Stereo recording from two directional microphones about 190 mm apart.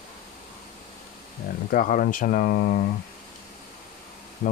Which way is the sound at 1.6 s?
45° left (ahead or behind).